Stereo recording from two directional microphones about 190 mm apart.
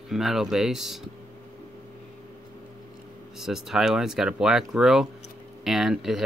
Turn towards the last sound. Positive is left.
turn(degrees=0)  # may be behind; listen again after turning